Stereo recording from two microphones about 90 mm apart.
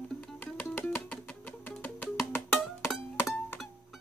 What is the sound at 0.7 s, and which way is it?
Music, 20° left (ahead or behind).